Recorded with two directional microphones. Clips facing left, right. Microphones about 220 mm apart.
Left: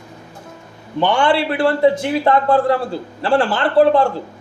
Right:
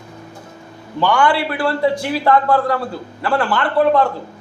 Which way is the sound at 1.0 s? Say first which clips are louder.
Left 1 dB; 25° left (ahead or behind).